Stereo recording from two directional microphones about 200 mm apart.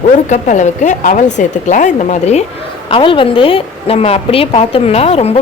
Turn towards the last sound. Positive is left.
turn(degrees=30)  # may be behind; listen again after turning